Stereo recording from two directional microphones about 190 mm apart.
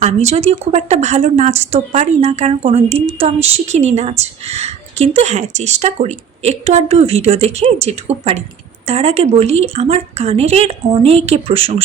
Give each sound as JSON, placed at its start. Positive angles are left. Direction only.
{"t": 0.0, "sound": "speech", "side_deg": -35}